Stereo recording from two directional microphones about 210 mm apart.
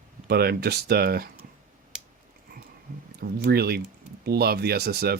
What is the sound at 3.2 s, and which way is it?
Speech, 45° right (ahead or behind).